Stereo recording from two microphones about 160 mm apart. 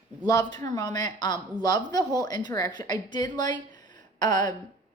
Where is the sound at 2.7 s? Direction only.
25° left (ahead or behind).